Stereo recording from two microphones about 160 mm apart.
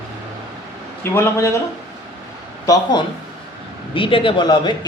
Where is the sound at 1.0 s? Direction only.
15° left (ahead or behind).